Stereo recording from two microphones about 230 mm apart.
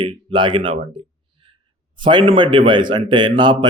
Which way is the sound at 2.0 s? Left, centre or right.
Right.